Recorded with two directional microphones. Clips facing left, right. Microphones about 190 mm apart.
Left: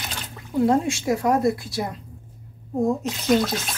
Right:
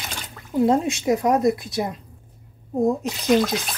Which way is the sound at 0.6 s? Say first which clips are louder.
Right 1 dB; 20° right (ahead or behind).